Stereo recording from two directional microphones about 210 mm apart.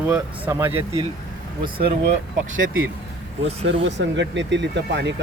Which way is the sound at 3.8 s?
60° right (ahead or behind).